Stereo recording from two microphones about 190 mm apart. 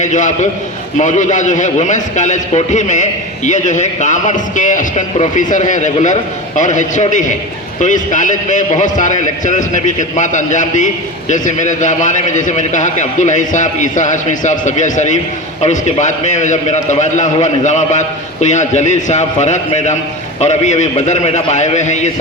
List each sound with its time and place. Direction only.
0.0 s a man's voice: 40° left (ahead or behind)